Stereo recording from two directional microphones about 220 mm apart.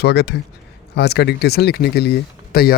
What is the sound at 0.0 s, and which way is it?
Speech, 50° left (ahead or behind).